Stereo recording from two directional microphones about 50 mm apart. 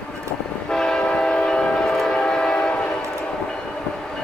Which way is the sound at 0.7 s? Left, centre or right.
Centre.